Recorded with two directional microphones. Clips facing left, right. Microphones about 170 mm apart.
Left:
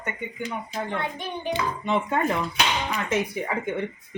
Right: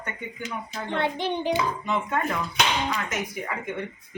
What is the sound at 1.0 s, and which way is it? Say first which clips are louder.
Hands: right 5 dB; 80° right.